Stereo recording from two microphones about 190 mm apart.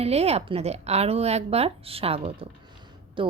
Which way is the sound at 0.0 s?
35° right (ahead or behind).